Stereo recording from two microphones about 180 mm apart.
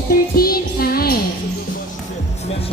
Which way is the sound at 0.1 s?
55° left (ahead or behind).